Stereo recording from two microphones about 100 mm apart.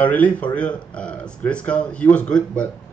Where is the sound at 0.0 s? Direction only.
15° left (ahead or behind).